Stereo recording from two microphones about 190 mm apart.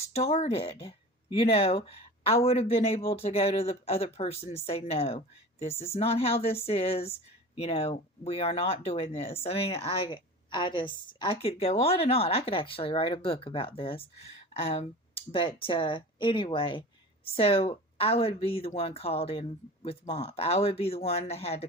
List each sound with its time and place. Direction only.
0.1 s speech: 35° left (ahead or behind)